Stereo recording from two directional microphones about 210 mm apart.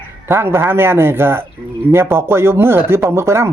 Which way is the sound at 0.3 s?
10° right (ahead or behind).